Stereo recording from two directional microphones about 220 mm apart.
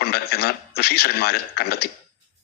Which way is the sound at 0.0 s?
45° left (ahead or behind).